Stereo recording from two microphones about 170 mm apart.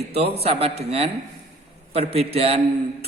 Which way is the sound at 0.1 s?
35° right (ahead or behind).